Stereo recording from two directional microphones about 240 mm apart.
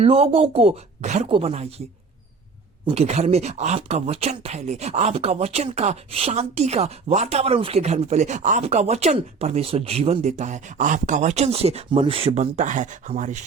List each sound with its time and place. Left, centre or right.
0.0 s speech: right
2.8 s speech: right